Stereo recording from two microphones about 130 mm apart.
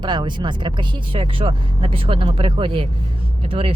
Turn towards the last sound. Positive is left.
turn(degrees=-45)  # may be behind; listen again after turning